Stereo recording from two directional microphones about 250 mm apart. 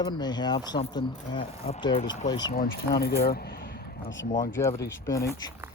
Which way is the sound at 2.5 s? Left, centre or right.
Left.